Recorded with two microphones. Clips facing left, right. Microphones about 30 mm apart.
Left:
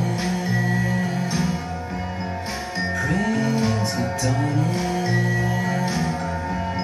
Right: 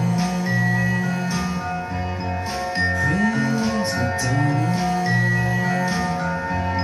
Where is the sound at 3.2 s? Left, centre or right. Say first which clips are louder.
Right 1 dB; right.